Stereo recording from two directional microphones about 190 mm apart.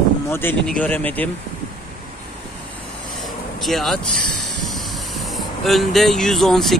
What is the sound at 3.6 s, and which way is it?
Speech, centre (ahead or behind).